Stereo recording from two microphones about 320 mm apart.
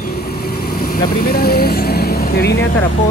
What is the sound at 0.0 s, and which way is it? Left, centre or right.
Vehicle, left.